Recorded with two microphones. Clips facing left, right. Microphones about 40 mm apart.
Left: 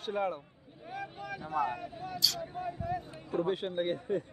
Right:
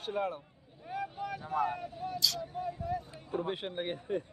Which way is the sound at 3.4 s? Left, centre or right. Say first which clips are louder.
Left 7 dB; right.